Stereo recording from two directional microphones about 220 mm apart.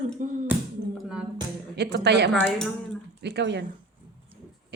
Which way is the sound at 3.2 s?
50° right (ahead or behind).